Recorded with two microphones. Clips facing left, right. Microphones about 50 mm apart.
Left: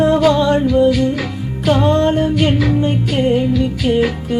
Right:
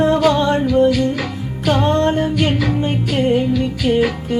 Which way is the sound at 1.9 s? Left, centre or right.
Left.